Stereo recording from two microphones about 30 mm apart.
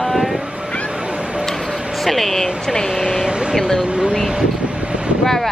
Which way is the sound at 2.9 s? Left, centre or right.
Centre.